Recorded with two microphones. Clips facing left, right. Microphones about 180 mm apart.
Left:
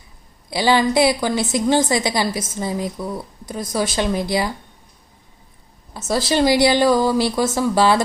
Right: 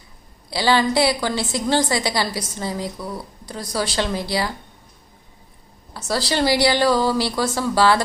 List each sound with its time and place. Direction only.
0.5 s a woman's voice: 15° left (ahead or behind)
5.9 s a woman's voice: 20° left (ahead or behind)